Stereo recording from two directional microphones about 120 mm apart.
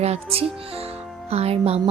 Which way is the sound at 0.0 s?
60° right (ahead or behind).